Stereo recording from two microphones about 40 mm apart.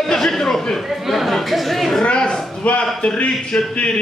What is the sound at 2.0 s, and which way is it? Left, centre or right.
A man's voice, left.